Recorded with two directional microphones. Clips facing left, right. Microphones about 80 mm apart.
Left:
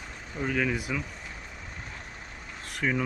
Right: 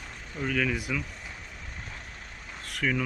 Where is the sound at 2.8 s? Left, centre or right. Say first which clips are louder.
Even; left.